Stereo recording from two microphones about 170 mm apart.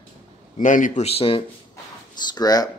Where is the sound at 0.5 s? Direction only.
50° left (ahead or behind); by 1.4 s 35° left (ahead or behind).